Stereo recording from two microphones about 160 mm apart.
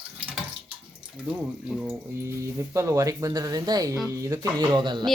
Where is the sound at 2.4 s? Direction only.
20° right (ahead or behind).